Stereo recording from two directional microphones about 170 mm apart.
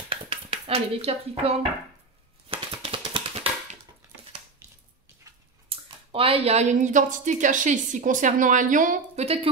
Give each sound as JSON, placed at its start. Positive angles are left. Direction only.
{"t": 0.1, "sound": "dishes", "side_deg": -30}
{"t": 2.5, "sound": "typewriter", "side_deg": -30}
{"t": 5.7, "sound": "speech", "side_deg": -35}